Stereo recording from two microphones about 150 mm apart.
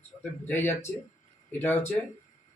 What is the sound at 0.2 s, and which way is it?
Speech, 15° left (ahead or behind).